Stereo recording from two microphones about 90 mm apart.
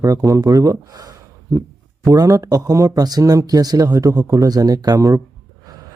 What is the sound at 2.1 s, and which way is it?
Speech, 40° right (ahead or behind).